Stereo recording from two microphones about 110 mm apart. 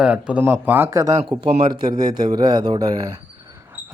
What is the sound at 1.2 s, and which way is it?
Speech, 60° right (ahead or behind).